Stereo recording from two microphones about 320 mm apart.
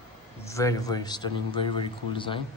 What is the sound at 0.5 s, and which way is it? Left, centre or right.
A man's voice, centre.